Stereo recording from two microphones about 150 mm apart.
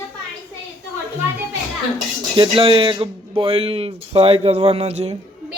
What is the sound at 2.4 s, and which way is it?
Speech, 35° right (ahead or behind).